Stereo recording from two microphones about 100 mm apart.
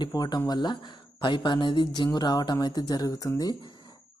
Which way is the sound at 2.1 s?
40° left (ahead or behind).